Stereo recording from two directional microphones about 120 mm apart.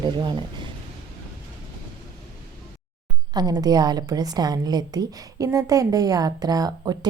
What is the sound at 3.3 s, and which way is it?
A woman's voice, 35° right (ahead or behind).